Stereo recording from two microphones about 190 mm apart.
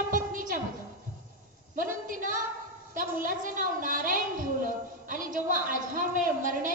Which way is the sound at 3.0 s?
45° right (ahead or behind).